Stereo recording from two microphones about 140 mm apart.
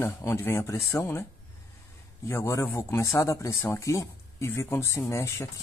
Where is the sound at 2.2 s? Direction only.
20° left (ahead or behind).